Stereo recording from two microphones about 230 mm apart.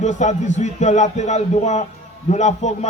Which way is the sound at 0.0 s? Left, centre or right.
Left.